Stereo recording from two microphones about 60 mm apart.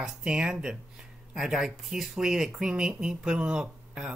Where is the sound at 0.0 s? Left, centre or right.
Centre.